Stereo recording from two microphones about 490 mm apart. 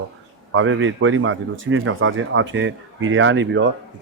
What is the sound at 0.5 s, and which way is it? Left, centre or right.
A man's voice, right.